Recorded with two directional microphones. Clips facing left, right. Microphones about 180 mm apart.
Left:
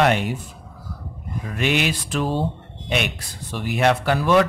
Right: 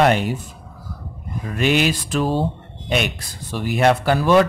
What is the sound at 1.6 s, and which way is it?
Speech, 40° right (ahead or behind).